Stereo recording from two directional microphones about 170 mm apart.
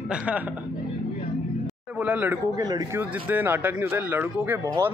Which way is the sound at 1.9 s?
10° right (ahead or behind).